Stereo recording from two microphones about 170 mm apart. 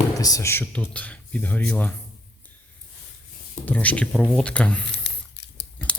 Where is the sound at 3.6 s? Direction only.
10° left (ahead or behind).